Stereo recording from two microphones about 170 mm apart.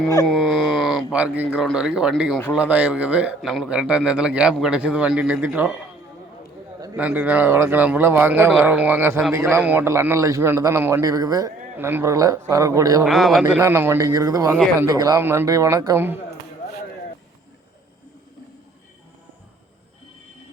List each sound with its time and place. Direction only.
0.3 s speech: centre (ahead or behind)
0.7 s a sound: centre (ahead or behind)
1.4 s a man's voice: 5° right (ahead or behind)
6.9 s a man's voice: 10° right (ahead or behind)
13.1 s speech: centre (ahead or behind)
13.6 s speech: 15° right (ahead or behind)